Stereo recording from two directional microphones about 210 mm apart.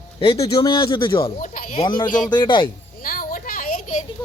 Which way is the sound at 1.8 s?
25° left (ahead or behind).